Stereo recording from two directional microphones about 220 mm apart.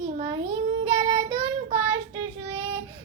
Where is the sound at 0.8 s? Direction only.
25° right (ahead or behind).